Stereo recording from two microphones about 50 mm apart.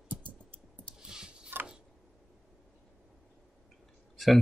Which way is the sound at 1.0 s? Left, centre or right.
Centre.